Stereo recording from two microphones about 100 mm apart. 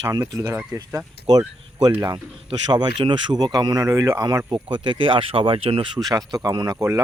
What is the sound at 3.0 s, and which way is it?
Speech, 50° right (ahead or behind).